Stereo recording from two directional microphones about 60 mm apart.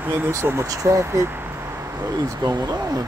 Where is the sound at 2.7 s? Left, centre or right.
Right.